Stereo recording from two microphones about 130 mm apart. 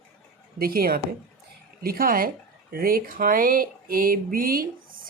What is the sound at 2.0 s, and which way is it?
Speech, 90° right.